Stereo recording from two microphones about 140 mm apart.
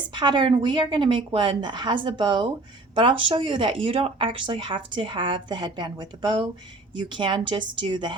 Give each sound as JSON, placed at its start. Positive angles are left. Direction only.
{"t": 0.1, "sound": "speech", "side_deg": -35}